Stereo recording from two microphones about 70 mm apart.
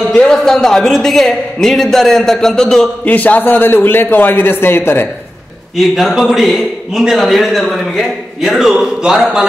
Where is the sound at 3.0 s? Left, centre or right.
Left.